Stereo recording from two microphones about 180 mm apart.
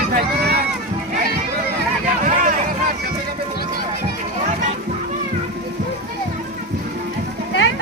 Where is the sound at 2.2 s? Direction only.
45° right (ahead or behind).